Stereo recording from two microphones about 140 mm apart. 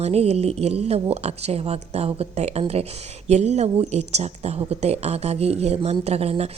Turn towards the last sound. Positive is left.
turn(degrees=-45)  # may be behind; listen again after turning